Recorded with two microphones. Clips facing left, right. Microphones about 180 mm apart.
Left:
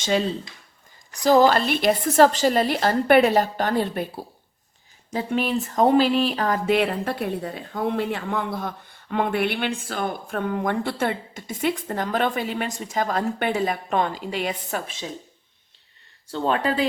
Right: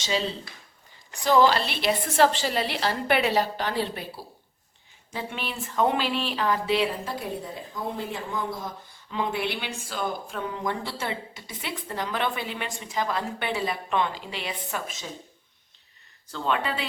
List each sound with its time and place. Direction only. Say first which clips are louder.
0.0 s speech: left 5 dB; 50° left (ahead or behind)
1.1 s speech: left 4 dB; 40° left (ahead or behind)
16.3 s speech: left 5 dB; 40° left (ahead or behind)